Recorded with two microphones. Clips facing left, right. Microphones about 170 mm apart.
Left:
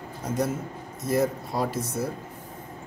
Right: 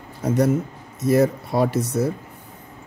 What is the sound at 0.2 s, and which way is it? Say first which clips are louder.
Speech: right 8 dB; 65° right (ahead or behind).